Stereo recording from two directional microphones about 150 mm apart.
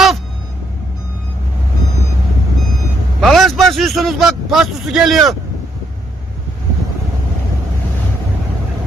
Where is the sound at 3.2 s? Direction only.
Centre (ahead or behind).